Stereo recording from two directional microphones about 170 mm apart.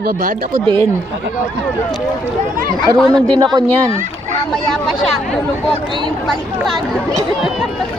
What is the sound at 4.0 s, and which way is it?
Speech, 45° right (ahead or behind).